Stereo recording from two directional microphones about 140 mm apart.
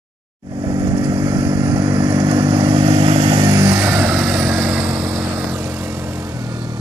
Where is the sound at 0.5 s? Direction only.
30° right (ahead or behind).